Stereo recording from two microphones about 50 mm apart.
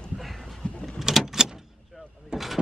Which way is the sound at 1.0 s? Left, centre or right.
Centre.